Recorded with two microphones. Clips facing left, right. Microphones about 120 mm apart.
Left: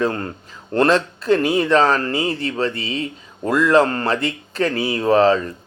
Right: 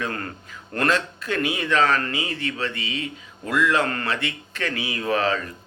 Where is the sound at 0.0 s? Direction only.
25° left (ahead or behind).